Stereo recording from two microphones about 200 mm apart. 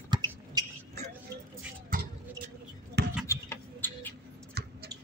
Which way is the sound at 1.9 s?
45° right (ahead or behind).